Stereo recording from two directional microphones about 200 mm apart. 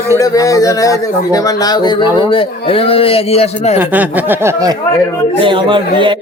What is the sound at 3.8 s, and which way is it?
Speech, 10° right (ahead or behind).